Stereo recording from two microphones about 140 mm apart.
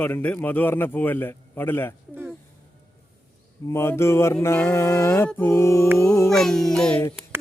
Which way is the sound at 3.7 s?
20° left (ahead or behind).